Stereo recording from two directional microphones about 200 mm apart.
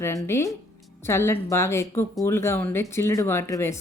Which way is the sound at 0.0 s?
15° left (ahead or behind).